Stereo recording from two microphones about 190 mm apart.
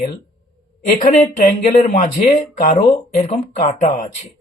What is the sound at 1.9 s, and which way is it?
Speech, 40° left (ahead or behind).